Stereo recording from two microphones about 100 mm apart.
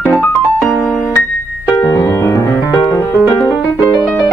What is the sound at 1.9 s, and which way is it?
Music, 30° left (ahead or behind).